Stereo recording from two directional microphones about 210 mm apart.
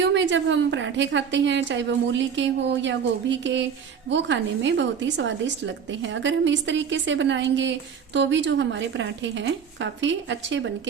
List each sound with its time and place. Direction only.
0.0 s a woman's voice: 60° right (ahead or behind)